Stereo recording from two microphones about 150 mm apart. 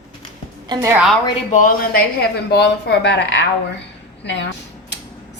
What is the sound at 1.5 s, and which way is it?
Speech, 60° left (ahead or behind).